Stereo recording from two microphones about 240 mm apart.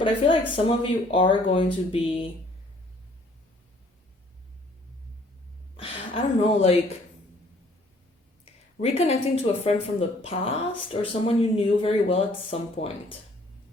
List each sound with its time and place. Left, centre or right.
0.0 s speech: left
5.7 s speech: left
8.8 s speech: left